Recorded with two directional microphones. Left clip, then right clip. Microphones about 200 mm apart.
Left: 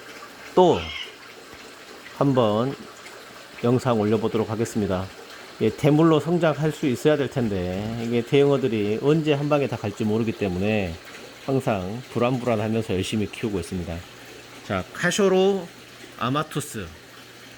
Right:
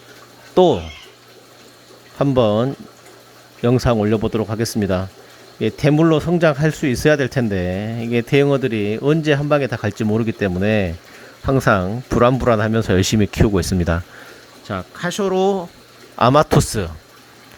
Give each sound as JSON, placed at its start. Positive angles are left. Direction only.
{"t": 0.5, "sound": "speech", "side_deg": -30}
{"t": 2.1, "sound": "speech", "side_deg": -35}
{"t": 5.5, "sound": "speech", "side_deg": -30}
{"t": 14.7, "sound": "speech", "side_deg": -15}
{"t": 16.1, "sound": "speech", "side_deg": -40}